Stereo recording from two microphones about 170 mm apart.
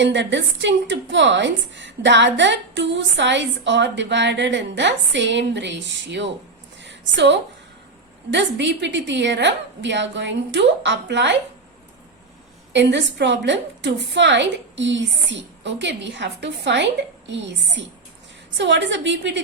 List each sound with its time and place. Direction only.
0.0 s a woman's voice: 90° right
6.8 s a sound: 90° right
8.3 s a woman's voice: 90° right
12.7 s a woman's voice: 90° right